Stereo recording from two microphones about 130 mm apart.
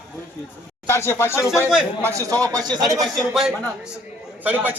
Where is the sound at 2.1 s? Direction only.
25° right (ahead or behind).